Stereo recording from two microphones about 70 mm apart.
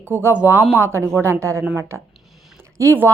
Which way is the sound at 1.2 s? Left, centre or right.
Right.